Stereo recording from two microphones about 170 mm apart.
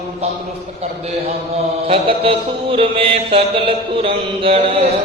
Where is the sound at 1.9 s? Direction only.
35° right (ahead or behind).